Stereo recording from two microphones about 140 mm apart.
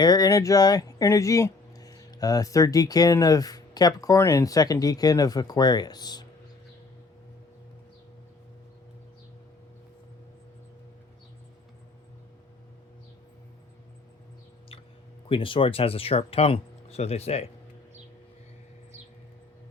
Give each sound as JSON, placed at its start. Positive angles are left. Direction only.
{"t": 0.0, "sound": "speech", "side_deg": 30}
{"t": 15.3, "sound": "speech", "side_deg": 40}